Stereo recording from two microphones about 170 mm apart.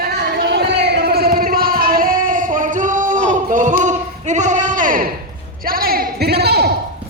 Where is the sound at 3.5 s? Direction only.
50° right (ahead or behind); by 6.7 s 70° right (ahead or behind).